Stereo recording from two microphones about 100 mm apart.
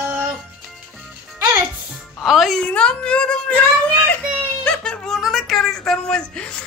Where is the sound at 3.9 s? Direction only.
15° left (ahead or behind).